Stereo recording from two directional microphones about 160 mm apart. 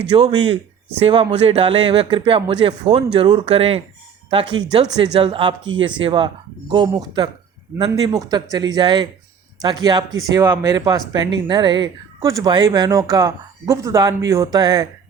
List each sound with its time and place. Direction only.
0.1 s speech: 30° right (ahead or behind)